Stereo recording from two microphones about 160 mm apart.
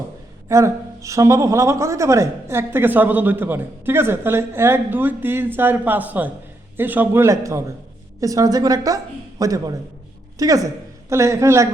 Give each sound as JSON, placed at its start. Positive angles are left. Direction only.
{"t": 0.4, "sound": "a woman's voice", "side_deg": -20}